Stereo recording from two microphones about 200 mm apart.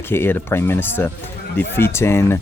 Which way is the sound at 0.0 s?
10° left (ahead or behind).